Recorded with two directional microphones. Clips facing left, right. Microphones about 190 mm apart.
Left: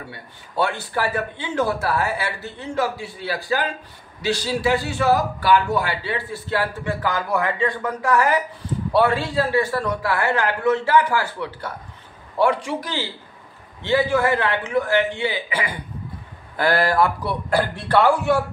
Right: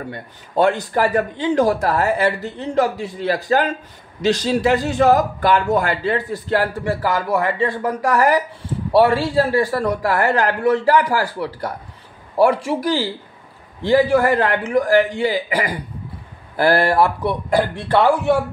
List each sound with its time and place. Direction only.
0.9 s a woman's voice: 40° right (ahead or behind)
4.3 s a man's voice: 20° right (ahead or behind)
4.9 s a woman's voice: 45° right (ahead or behind); by 18.4 s 20° right (ahead or behind)